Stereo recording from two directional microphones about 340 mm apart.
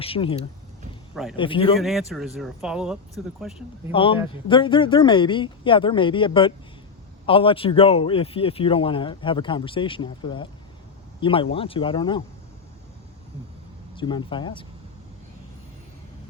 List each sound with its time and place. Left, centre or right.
0.0 s speech: centre
1.1 s speech: centre
1.4 s speech: centre
1.8 s speech: centre
3.9 s speech: centre
13.9 s speech: centre